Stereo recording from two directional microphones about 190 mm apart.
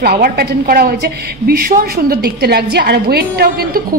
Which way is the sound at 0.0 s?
55° right (ahead or behind).